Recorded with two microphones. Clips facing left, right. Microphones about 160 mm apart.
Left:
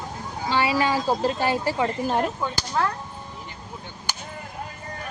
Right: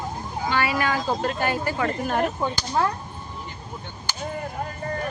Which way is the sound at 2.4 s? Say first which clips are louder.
Right 2 dB; 20° right (ahead or behind).